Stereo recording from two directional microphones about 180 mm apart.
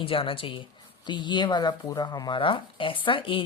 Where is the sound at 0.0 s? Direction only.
30° left (ahead or behind).